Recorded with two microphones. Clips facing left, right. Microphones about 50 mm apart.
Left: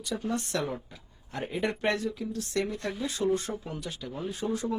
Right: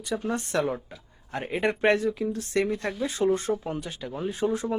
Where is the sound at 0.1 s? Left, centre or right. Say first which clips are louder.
Right 3 dB; right.